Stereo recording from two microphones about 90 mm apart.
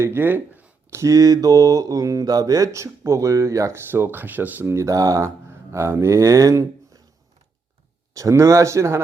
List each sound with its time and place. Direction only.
0.0 s a sound: 25° right (ahead or behind)
0.9 s mantra: 40° right (ahead or behind)
3.8 s speech: 25° right (ahead or behind)
4.8 s speech: 40° right (ahead or behind)
8.1 s mantra: 35° right (ahead or behind)